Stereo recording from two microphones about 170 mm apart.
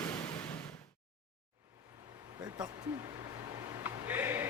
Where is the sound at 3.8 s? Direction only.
10° right (ahead or behind).